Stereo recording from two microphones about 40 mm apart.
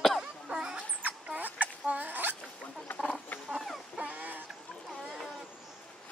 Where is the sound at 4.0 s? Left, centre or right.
Right.